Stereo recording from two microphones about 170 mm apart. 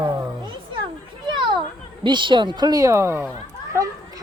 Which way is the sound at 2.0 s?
30° right (ahead or behind).